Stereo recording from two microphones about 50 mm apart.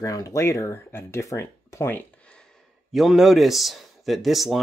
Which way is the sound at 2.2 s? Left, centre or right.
Centre.